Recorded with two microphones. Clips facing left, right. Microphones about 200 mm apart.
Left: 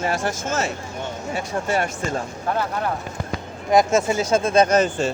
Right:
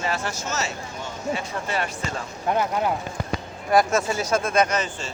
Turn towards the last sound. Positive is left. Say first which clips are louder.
# left 5 dB
turn(degrees=30)  # may be behind; listen again after turning